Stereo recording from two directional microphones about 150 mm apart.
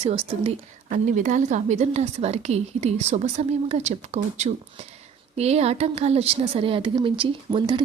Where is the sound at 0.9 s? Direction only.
60° right (ahead or behind).